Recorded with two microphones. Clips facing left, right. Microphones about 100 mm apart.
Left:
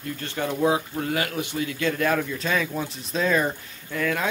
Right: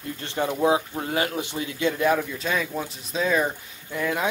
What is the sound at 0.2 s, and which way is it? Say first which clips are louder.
Speech: right 1 dB; 25° right (ahead or behind).